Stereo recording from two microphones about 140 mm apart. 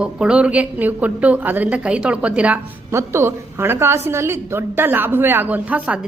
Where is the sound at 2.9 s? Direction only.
20° right (ahead or behind).